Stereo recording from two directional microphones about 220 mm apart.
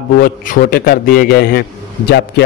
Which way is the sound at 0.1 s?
40° left (ahead or behind).